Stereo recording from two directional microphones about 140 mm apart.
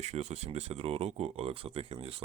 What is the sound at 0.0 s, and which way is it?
Speech, 55° right (ahead or behind).